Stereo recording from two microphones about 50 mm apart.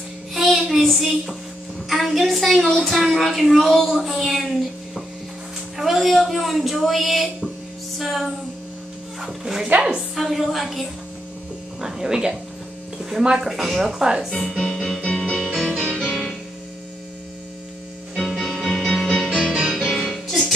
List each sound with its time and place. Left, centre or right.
0.3 s child singing: centre
1.9 s a woman's voice: centre
9.4 s a woman's voice: centre
11.8 s a woman's voice: centre
14.7 s music: centre
15.6 s music: centre
16.0 s music: centre
18.1 s music: centre
19.3 s music: right
20.0 s music: centre